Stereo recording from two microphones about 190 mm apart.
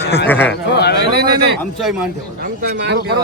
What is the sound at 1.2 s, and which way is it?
Speech, 55° right (ahead or behind).